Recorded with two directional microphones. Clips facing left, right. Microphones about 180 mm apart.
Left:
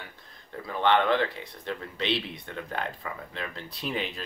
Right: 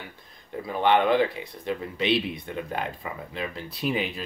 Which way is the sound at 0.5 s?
15° right (ahead or behind).